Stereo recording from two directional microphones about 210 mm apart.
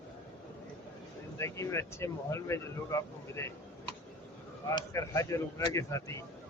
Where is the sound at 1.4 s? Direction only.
15° left (ahead or behind).